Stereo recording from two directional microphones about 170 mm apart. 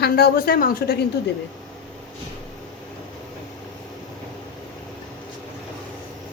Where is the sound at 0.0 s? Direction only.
65° left (ahead or behind).